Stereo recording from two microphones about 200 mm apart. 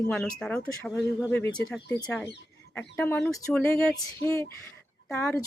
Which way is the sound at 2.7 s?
10° left (ahead or behind).